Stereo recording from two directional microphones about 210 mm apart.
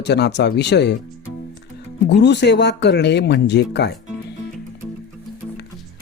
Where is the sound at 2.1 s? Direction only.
55° left (ahead or behind).